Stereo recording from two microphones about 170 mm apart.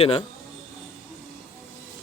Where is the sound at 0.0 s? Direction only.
35° left (ahead or behind).